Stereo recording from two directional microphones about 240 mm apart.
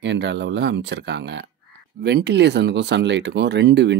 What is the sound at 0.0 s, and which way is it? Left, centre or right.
Speech, right.